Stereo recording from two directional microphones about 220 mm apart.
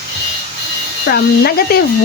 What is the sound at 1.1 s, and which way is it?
Speech, 45° left (ahead or behind).